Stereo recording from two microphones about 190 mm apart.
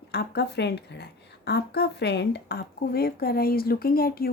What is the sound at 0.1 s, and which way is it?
A woman's voice, 60° left (ahead or behind).